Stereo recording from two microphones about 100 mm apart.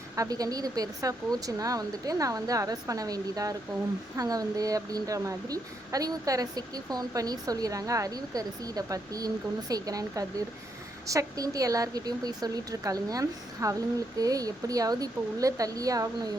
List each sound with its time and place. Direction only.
0.2 s a woman's voice: 35° right (ahead or behind)